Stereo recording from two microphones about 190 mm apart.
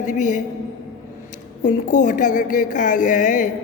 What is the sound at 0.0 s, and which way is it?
Speech, 40° left (ahead or behind).